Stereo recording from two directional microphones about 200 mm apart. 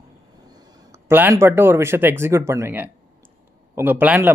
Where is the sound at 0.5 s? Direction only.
20° right (ahead or behind).